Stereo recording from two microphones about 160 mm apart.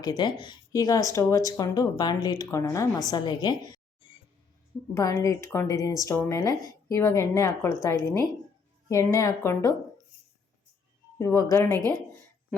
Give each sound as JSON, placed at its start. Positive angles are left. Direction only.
{"t": 0.0, "sound": "speech", "side_deg": 25}
{"t": 4.9, "sound": "speech", "side_deg": 20}
{"t": 11.2, "sound": "speech", "side_deg": 15}